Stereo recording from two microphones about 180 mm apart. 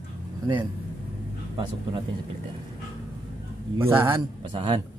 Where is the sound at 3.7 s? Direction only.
10° right (ahead or behind).